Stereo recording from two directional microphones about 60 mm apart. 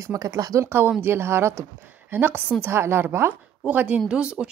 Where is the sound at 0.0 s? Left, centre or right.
Right.